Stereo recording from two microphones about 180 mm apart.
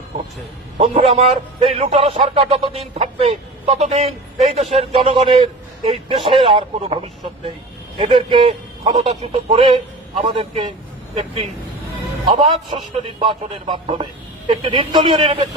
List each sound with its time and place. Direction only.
0.8 s a man's voice: 40° right (ahead or behind)